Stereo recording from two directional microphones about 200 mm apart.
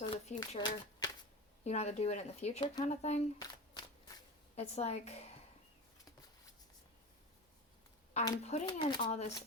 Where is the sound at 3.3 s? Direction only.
20° left (ahead or behind).